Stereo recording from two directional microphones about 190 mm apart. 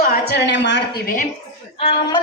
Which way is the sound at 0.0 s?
55° left (ahead or behind).